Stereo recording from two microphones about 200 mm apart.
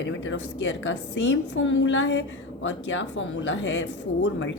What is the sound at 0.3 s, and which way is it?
Speech, 65° left (ahead or behind).